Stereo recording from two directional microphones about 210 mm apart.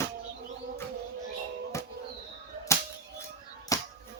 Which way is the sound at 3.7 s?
15° left (ahead or behind).